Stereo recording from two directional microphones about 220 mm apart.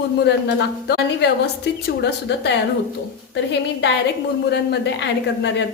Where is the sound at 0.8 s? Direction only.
50° left (ahead or behind).